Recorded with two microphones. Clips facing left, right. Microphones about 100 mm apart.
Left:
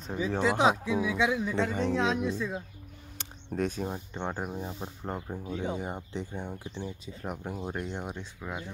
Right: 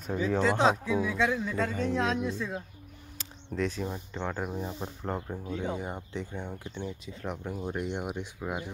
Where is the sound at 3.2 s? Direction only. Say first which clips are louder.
Left 1 dB; 50° left (ahead or behind).